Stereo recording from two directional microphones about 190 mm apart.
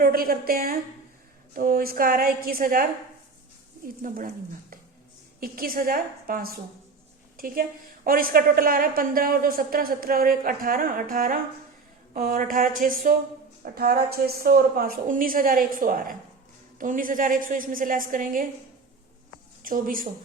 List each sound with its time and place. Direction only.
0.0 s a woman's voice: 50° right (ahead or behind)
4.0 s a woman's voice: 45° right (ahead or behind)
5.4 s a woman's voice: 50° right (ahead or behind)
19.6 s a woman's voice: 45° right (ahead or behind)